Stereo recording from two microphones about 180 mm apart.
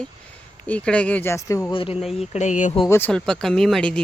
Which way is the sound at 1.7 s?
30° left (ahead or behind).